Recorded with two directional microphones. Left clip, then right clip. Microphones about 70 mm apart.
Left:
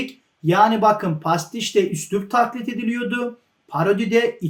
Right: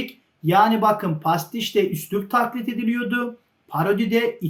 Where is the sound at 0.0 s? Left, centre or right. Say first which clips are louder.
Left 2 dB; right.